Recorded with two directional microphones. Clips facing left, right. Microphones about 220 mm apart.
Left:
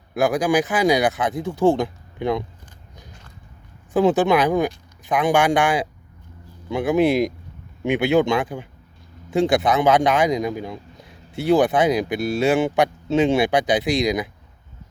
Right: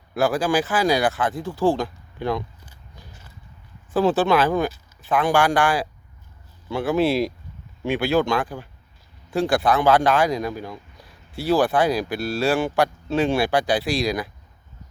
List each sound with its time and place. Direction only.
0.1 s a man's voice: 15° left (ahead or behind)
3.1 s biting: 5° right (ahead or behind)
3.9 s a man's voice: 15° left (ahead or behind)